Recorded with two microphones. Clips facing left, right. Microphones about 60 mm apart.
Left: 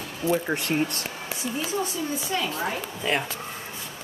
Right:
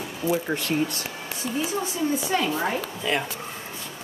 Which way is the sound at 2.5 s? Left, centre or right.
Centre.